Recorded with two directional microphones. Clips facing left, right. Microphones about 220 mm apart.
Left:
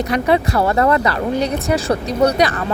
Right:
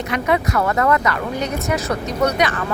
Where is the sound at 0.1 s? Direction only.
30° left (ahead or behind).